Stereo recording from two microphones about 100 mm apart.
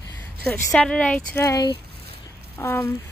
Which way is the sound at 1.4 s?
30° left (ahead or behind).